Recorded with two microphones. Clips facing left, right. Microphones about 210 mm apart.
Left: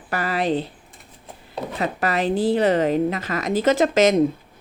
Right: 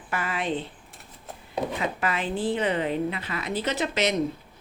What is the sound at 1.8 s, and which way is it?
A woman's voice, 40° left (ahead or behind).